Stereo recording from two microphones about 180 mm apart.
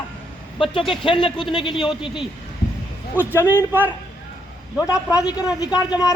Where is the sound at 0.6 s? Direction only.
30° left (ahead or behind).